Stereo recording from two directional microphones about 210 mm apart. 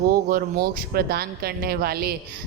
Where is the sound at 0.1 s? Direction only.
45° right (ahead or behind).